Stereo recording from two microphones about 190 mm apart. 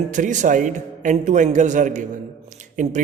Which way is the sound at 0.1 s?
40° right (ahead or behind).